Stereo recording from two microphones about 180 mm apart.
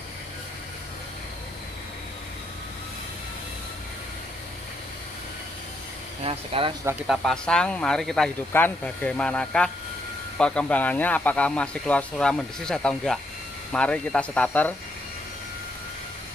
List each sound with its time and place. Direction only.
6.2 s speech: 30° right (ahead or behind)
7.1 s speech: 5° left (ahead or behind)